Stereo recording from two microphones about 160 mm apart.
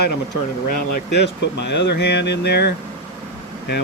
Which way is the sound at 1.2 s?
90° left.